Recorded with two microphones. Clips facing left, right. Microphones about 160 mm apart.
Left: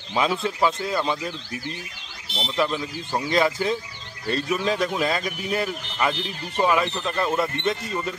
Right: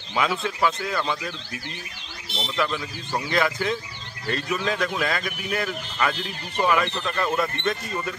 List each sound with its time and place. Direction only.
0.1 s speech: 25° left (ahead or behind)
2.5 s speech: 20° left (ahead or behind)